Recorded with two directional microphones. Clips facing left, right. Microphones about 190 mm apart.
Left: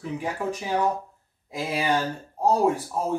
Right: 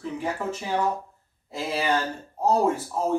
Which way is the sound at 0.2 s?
15° left (ahead or behind).